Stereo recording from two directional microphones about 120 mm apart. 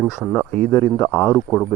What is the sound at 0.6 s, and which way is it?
Speech, 20° left (ahead or behind).